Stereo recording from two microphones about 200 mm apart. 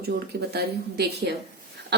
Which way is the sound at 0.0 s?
55° right (ahead or behind).